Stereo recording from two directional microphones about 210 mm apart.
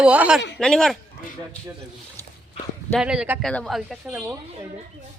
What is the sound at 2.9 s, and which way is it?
Speech, 5° right (ahead or behind).